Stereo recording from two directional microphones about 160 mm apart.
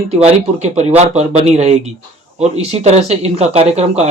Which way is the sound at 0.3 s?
45° right (ahead or behind).